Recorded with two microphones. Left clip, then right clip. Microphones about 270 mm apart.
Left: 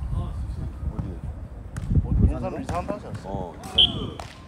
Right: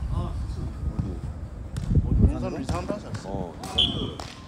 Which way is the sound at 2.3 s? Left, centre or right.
Left.